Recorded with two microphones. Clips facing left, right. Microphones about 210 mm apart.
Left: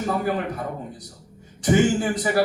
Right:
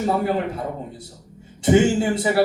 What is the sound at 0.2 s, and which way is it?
A man's voice, 25° right (ahead or behind).